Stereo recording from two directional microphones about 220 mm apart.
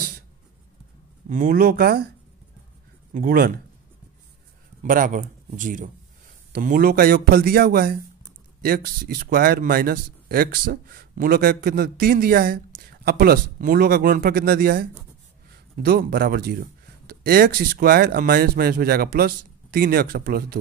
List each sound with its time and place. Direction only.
1.3 s speech: 40° right (ahead or behind)
3.1 s speech: 40° right (ahead or behind)
4.8 s speech: 35° right (ahead or behind)